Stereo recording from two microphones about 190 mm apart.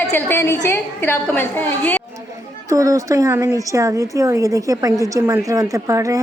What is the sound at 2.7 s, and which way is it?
A woman's voice, 15° right (ahead or behind).